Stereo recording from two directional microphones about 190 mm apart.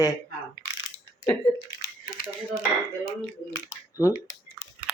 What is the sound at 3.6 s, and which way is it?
Speech, 15° left (ahead or behind).